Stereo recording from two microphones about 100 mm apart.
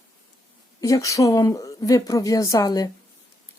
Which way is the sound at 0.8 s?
35° left (ahead or behind).